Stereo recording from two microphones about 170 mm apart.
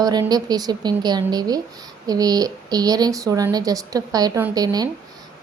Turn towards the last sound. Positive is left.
turn(degrees=-20)  # may be behind; listen again after turning